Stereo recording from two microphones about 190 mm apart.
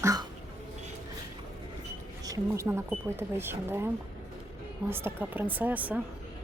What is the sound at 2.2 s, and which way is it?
Speech, 15° right (ahead or behind).